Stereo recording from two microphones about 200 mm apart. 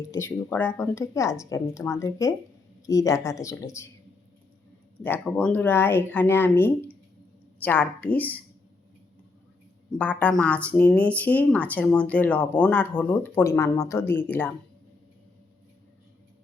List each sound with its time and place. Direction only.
0.1 s speech: 15° left (ahead or behind)
5.0 s speech: 10° left (ahead or behind)
10.0 s speech: 5° left (ahead or behind)